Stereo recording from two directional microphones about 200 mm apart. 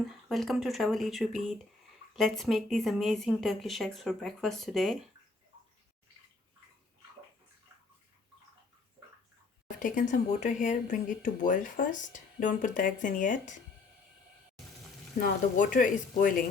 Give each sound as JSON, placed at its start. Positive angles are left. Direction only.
{"t": 0.0, "sound": "speech", "side_deg": 0}
{"t": 9.8, "sound": "speech", "side_deg": 40}
{"t": 15.2, "sound": "speech", "side_deg": 40}